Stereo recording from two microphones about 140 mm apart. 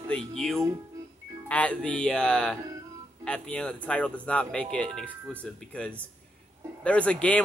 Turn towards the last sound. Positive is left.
turn(degrees=10)  # may be behind; listen again after turning